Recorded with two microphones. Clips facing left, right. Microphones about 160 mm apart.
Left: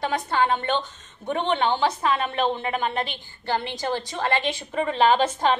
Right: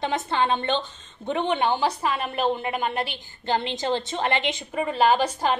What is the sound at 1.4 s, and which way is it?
A woman's voice, 10° right (ahead or behind).